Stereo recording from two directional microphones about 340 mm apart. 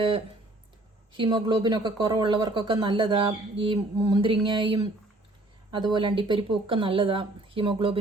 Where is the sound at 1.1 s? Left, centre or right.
Centre.